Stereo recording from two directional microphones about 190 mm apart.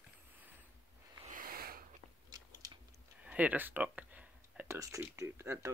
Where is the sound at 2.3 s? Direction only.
20° right (ahead or behind).